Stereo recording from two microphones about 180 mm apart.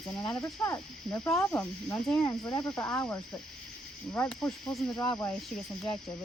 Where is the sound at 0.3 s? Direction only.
15° left (ahead or behind).